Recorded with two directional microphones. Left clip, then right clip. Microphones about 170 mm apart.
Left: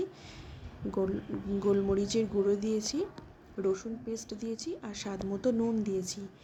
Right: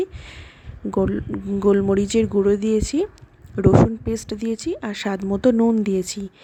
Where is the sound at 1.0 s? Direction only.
55° right (ahead or behind).